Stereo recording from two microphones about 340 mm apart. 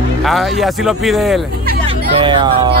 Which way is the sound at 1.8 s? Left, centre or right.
Centre.